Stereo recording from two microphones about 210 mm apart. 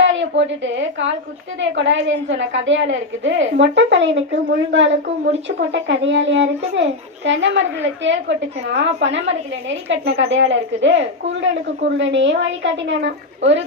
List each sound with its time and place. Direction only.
0.0 s a woman's voice: 60° right (ahead or behind)